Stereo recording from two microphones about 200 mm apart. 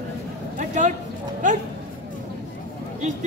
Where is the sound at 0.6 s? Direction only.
35° right (ahead or behind).